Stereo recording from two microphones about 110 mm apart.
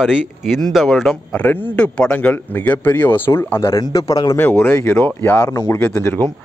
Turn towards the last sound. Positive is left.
turn(degrees=25)  # may be behind; listen again after turning